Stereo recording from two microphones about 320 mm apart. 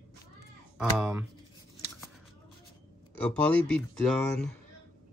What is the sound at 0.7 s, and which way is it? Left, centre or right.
Speech, centre.